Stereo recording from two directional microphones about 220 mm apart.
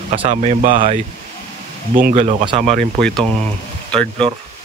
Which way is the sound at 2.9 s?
5° left (ahead or behind).